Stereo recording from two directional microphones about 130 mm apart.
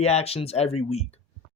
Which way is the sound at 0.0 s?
50° left (ahead or behind).